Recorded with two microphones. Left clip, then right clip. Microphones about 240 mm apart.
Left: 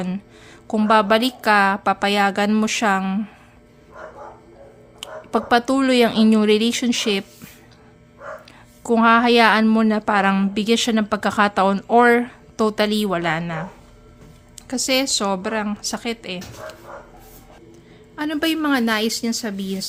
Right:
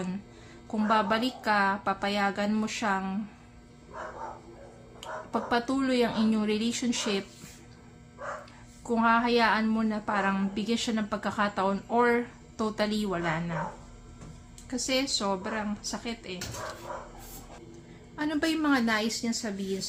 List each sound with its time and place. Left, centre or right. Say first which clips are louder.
0.7 s a woman's voice: left 10 dB; left
4.9 s a woman's voice: left 9 dB; left
8.8 s a woman's voice: left 10 dB; left
14.7 s a woman's voice: left 9 dB; left
18.2 s a woman's voice: left 7 dB; left